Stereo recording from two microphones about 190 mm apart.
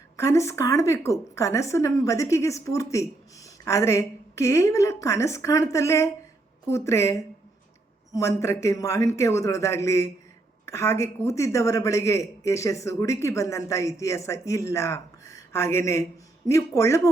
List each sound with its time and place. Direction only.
0.2 s a woman's voice: 15° left (ahead or behind)